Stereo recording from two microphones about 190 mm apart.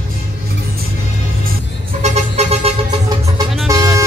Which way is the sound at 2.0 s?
35° right (ahead or behind).